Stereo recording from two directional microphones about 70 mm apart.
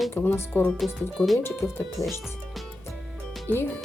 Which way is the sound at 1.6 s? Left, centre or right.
Left.